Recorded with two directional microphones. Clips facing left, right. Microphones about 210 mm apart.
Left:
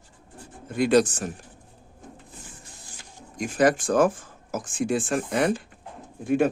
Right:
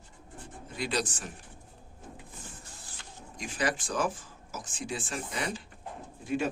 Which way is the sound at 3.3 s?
45° left (ahead or behind).